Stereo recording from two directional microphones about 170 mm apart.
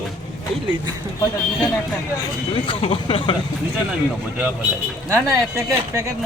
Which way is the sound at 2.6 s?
30° left (ahead or behind).